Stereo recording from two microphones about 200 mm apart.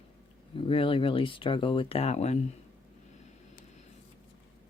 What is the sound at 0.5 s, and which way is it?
Speech, 25° left (ahead or behind).